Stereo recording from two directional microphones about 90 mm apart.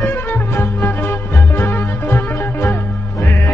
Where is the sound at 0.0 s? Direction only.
25° left (ahead or behind).